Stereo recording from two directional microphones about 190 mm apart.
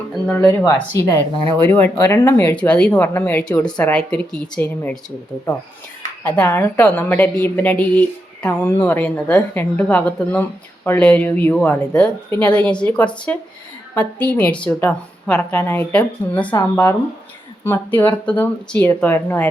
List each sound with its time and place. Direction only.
0.1 s a woman's voice: 5° left (ahead or behind)
0.6 s a woman's voice: 15° left (ahead or behind)
6.2 s a woman's voice: 10° left (ahead or behind)